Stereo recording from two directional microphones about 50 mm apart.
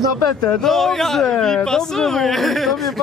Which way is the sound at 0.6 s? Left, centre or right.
Centre.